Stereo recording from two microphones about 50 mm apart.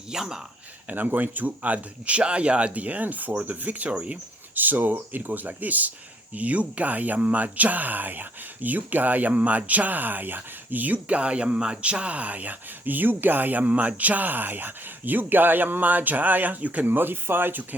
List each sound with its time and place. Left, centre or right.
0.1 s speech: centre
0.9 s speech: right
4.5 s speech: right